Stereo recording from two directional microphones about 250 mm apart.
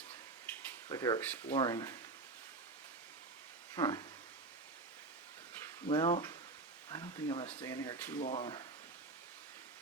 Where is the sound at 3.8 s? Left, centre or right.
Centre.